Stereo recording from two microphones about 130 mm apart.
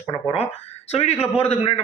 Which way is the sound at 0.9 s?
50° left (ahead or behind).